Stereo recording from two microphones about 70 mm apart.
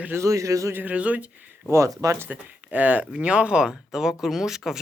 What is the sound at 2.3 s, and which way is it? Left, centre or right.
Speech, right.